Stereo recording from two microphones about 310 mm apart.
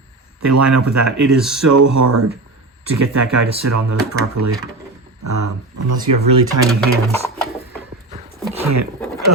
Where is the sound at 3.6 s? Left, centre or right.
Right.